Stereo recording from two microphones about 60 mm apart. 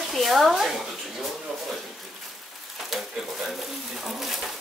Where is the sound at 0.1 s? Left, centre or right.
Centre.